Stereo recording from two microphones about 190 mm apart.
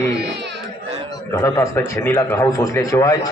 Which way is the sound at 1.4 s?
15° left (ahead or behind).